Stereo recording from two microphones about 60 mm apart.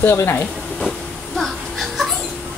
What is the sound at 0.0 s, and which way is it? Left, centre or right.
Speech, left.